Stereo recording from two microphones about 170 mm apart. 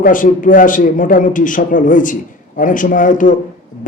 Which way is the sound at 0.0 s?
50° left (ahead or behind).